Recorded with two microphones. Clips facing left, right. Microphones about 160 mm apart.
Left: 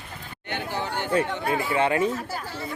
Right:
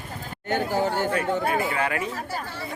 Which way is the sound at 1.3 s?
40° right (ahead or behind).